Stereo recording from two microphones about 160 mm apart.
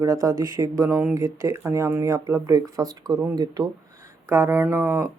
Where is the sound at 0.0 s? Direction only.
20° right (ahead or behind).